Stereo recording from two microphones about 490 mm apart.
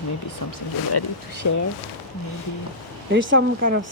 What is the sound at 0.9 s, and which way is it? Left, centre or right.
Speech, left.